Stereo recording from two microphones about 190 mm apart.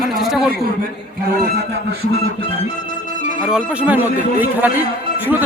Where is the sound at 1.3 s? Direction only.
55° right (ahead or behind).